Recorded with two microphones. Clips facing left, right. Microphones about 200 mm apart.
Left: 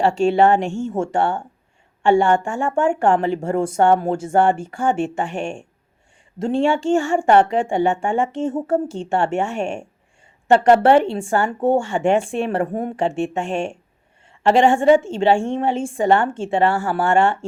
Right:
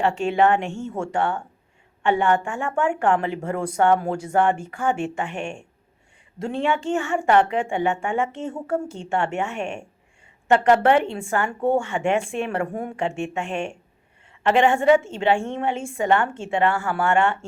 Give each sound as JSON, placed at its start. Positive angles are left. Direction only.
{"t": 0.0, "sound": "a woman's voice", "side_deg": 30}
{"t": 3.6, "sound": "a woman's voice", "side_deg": 25}
{"t": 4.9, "sound": "a woman's voice", "side_deg": 40}
{"t": 9.0, "sound": "a woman's voice", "side_deg": 40}
{"t": 14.4, "sound": "a woman's voice", "side_deg": 30}